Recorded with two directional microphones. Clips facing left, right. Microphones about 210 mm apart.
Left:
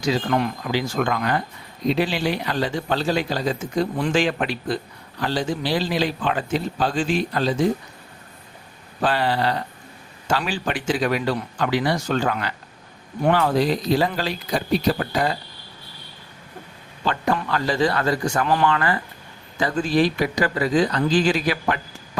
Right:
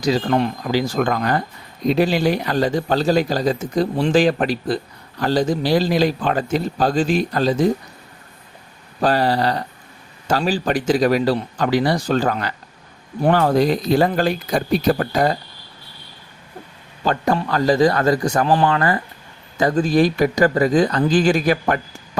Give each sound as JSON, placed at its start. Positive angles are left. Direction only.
{"t": 0.0, "sound": "speech", "side_deg": -35}
{"t": 9.0, "sound": "speech", "side_deg": -40}
{"t": 17.0, "sound": "a man's voice", "side_deg": -40}